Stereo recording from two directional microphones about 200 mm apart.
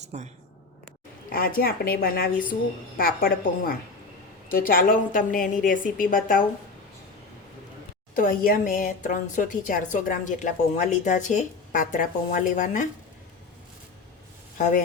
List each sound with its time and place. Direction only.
0.1 s speech: 35° right (ahead or behind)
1.3 s a woman's voice: 45° left (ahead or behind)
8.1 s a woman's voice: 45° left (ahead or behind)